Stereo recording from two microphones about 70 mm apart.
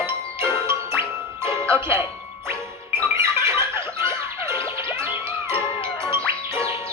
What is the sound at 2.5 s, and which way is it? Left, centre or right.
Music, right.